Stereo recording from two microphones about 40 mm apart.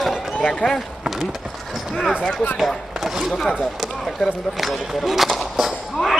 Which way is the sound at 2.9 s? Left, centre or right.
Centre.